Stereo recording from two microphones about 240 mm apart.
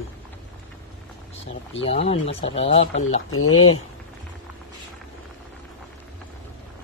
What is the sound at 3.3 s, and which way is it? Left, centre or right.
Speech, left.